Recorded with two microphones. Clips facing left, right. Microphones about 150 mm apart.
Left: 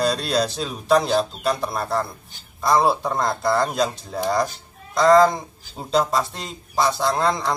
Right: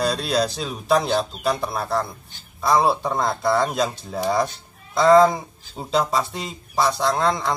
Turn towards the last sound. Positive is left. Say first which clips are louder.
# even
turn(degrees=0)  # may be behind; listen again after turning